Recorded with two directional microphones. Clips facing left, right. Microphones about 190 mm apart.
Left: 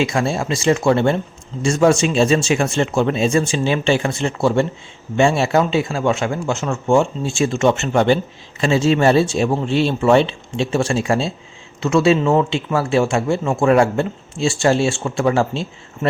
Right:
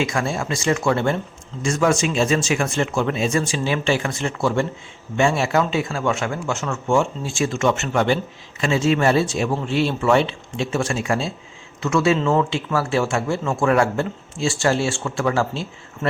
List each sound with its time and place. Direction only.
0.0 s speech: 25° left (ahead or behind)